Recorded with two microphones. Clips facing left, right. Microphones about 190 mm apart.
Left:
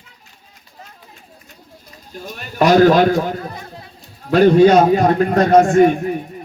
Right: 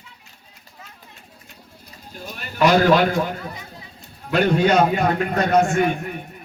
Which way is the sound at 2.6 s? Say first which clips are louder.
Left 5 dB; 40° left (ahead or behind).